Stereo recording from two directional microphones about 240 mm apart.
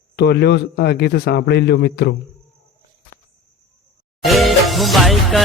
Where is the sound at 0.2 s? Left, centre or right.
Left.